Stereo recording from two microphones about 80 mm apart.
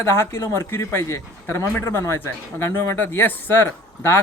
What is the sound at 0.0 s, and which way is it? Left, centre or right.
A man's voice, left.